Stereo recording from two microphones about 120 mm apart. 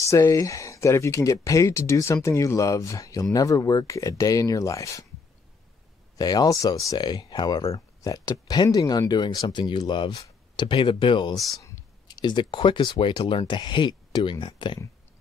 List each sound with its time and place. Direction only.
0.0 s speech: 25° left (ahead or behind)
6.1 s speech: 30° left (ahead or behind)